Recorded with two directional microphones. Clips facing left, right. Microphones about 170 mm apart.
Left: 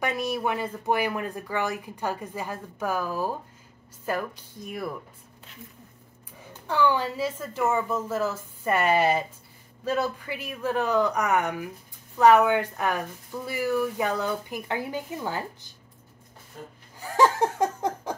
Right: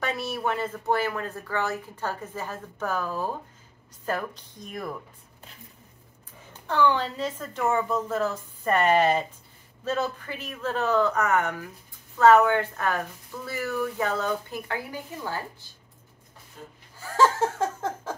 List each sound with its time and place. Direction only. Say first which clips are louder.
0.0 s speech: left 2 dB; 15° left (ahead or behind)
6.7 s speech: even; 10° left (ahead or behind)
17.0 s laughter: left 1 dB; 15° left (ahead or behind)